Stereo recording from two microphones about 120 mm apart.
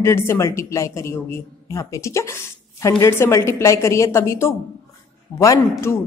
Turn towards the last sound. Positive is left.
turn(degrees=20)  # may be behind; listen again after turning